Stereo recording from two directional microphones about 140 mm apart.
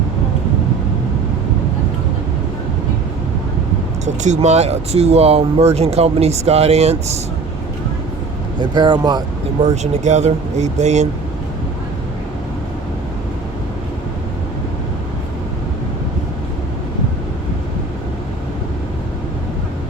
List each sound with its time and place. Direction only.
4.0 s speech: 55° right (ahead or behind)
8.7 s speech: 30° right (ahead or behind)
9.6 s speech: 55° right (ahead or behind)